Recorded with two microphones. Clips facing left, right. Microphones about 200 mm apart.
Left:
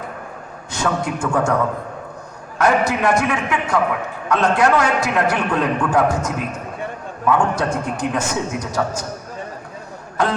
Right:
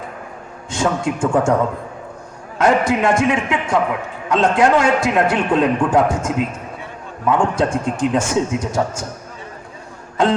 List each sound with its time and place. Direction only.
0.7 s a man's voice: 25° right (ahead or behind)
2.6 s a man's voice: 25° right (ahead or behind)
10.2 s a man's voice: 25° right (ahead or behind)